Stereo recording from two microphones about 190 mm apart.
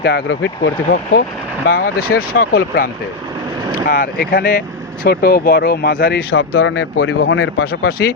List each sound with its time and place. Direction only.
0.0 s speech: 70° left (ahead or behind)
1.1 s speech: 50° left (ahead or behind)